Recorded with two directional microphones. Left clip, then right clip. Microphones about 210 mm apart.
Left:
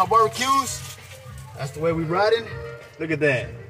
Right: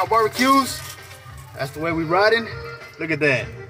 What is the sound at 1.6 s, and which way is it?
Speech, 10° right (ahead or behind).